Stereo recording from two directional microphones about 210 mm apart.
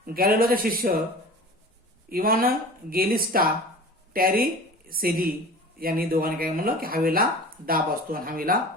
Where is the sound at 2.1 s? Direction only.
45° right (ahead or behind).